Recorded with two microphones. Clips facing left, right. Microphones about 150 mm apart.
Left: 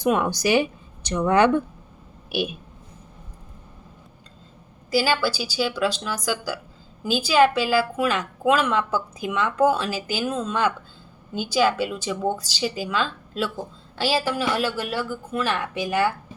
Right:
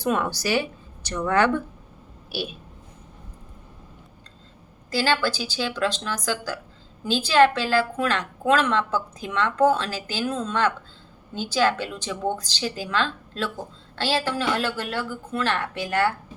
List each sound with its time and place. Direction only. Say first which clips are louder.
0.0 s a woman's voice: left 3 dB; 15° left (ahead or behind)
4.9 s a woman's voice: left 2 dB; 10° left (ahead or behind)